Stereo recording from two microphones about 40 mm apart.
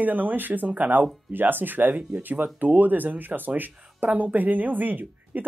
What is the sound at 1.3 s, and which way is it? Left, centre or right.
Speech, right.